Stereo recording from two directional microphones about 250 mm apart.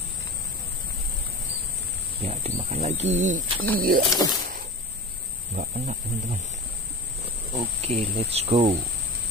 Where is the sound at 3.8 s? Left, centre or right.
Right.